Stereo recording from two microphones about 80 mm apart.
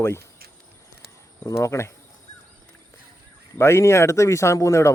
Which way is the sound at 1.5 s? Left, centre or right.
Left.